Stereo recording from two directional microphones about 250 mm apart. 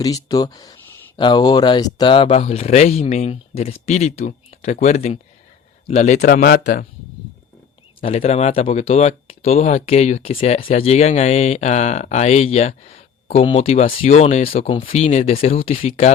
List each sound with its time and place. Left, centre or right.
0.0 s speech: centre; by 6.8 s left
8.0 s speech: left